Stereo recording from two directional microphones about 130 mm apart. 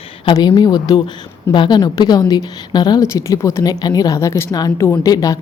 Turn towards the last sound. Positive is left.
turn(degrees=25)  # may be behind; listen again after turning